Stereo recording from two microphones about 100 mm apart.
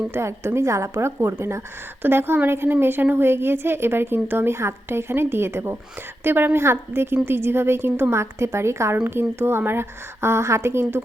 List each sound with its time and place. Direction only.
0.1 s a woman's voice: 25° right (ahead or behind)